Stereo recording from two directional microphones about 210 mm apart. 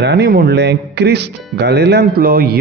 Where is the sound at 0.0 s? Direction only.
55° right (ahead or behind).